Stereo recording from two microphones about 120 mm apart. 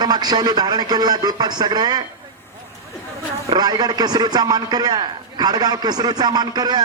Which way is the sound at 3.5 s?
35° right (ahead or behind).